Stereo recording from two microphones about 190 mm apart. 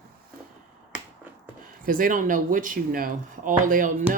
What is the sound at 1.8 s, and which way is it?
Speech, 45° right (ahead or behind).